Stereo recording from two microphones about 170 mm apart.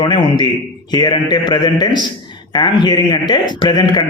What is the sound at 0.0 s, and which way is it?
A man's voice, 25° left (ahead or behind).